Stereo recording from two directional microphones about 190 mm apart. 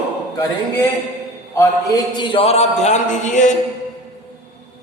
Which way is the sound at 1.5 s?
15° left (ahead or behind).